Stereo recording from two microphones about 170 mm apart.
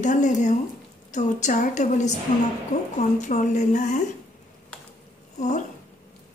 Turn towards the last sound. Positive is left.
turn(degrees=45)  # may be behind; listen again after turning